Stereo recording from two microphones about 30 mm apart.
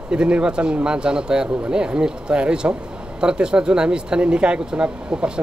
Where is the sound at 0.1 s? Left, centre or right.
Right.